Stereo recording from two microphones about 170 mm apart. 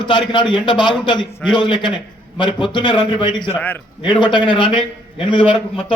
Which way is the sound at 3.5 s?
10° left (ahead or behind).